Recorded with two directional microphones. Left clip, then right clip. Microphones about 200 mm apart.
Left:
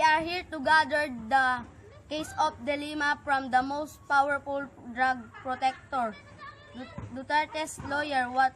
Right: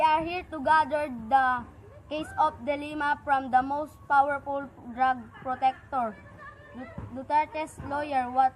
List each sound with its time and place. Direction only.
0.0 s child singing: 10° left (ahead or behind)
2.0 s a woman's voice: 15° left (ahead or behind)
7.2 s a woman's voice: 10° left (ahead or behind)